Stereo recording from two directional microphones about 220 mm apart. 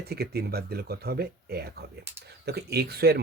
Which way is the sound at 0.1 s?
45° right (ahead or behind).